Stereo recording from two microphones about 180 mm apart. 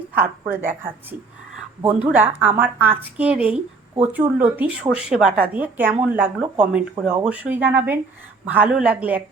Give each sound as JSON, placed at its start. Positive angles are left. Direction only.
{"t": 0.1, "sound": "speech", "side_deg": -10}
{"t": 1.8, "sound": "speech", "side_deg": -10}